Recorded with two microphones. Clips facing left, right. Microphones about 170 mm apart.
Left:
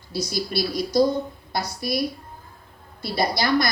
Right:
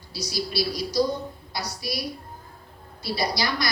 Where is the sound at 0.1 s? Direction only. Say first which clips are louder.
Left 4 dB; 50° left (ahead or behind).